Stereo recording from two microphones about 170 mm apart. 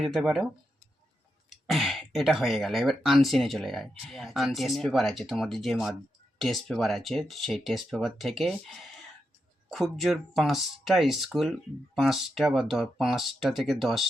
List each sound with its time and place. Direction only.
0.0 s speech: centre (ahead or behind)
1.5 s speech: centre (ahead or behind)